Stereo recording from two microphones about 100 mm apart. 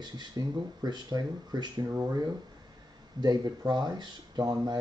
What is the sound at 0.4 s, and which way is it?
Speech, 40° right (ahead or behind).